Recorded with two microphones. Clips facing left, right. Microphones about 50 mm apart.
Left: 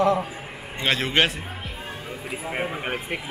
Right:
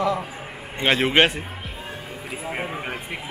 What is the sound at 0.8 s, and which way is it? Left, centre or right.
Speech, centre.